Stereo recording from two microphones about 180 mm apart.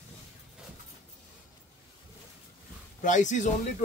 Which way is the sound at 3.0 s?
45° left (ahead or behind).